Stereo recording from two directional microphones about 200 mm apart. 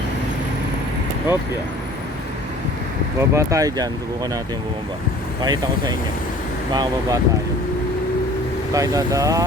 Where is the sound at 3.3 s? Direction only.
15° right (ahead or behind).